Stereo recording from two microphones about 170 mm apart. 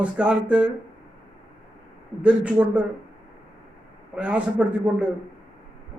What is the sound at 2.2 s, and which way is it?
Speech, 10° right (ahead or behind).